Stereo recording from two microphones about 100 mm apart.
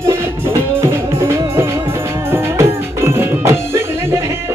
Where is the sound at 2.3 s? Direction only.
25° right (ahead or behind).